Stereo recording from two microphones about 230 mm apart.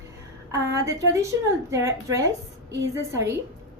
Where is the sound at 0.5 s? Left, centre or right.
Centre.